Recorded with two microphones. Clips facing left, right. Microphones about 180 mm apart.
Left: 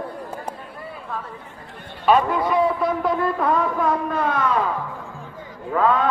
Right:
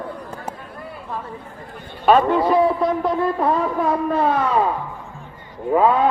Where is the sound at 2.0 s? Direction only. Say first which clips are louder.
Right 3 dB; 35° right (ahead or behind).